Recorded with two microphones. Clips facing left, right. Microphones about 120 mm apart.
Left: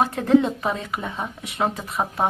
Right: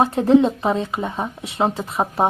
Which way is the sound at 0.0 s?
25° right (ahead or behind).